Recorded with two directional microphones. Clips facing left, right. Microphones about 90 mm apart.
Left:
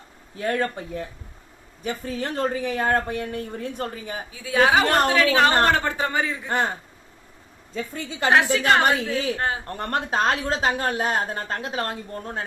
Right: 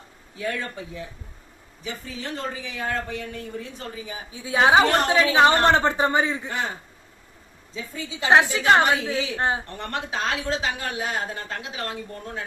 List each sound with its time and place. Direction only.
0.3 s a woman's voice: 50° left (ahead or behind)
4.3 s a woman's voice: 25° right (ahead or behind)
7.7 s a woman's voice: 55° left (ahead or behind)
8.3 s a woman's voice: 20° right (ahead or behind)
8.8 s a woman's voice: 45° left (ahead or behind)